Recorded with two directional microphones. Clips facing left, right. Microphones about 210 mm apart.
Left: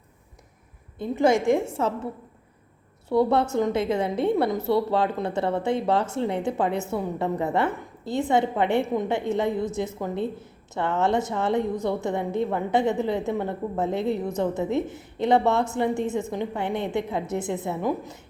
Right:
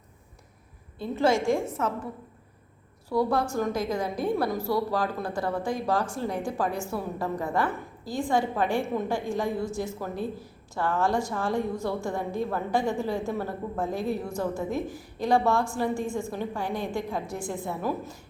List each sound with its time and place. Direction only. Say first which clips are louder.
0.9 s a woman's voice: left 3 dB; 15° left (ahead or behind)
3.1 s a woman's voice: left 4 dB; 25° left (ahead or behind)